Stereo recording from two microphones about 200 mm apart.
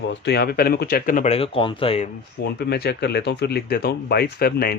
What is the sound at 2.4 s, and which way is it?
Speech, 55° left (ahead or behind).